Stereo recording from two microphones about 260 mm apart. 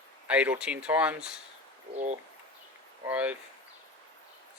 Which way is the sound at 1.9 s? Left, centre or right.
Right.